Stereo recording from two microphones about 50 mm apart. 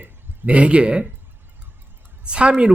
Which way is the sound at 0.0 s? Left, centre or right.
Right.